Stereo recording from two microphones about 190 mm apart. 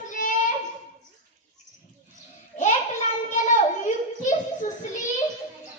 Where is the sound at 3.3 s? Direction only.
40° left (ahead or behind).